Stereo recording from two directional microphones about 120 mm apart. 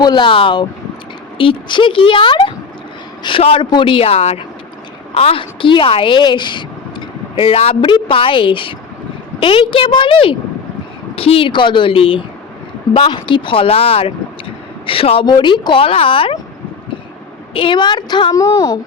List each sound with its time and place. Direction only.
0.0 s a woman's voice: 40° left (ahead or behind)
17.5 s a woman's voice: 45° left (ahead or behind)